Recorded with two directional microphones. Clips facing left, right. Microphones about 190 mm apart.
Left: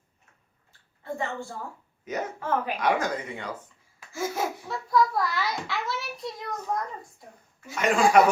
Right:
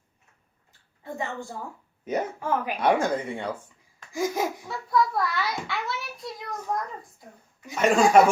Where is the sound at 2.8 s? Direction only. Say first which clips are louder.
Right 7 dB; 30° right (ahead or behind).